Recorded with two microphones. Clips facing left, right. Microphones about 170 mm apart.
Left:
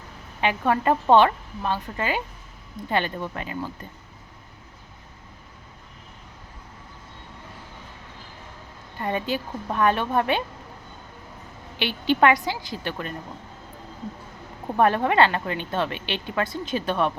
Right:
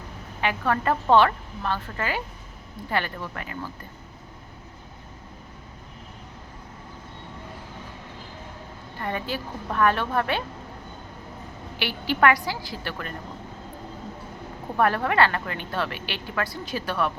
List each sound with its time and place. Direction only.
0.4 s a woman's voice: 20° left (ahead or behind)
9.0 s a woman's voice: 20° left (ahead or behind)
11.8 s a woman's voice: 20° left (ahead or behind)
14.8 s a woman's voice: 20° left (ahead or behind)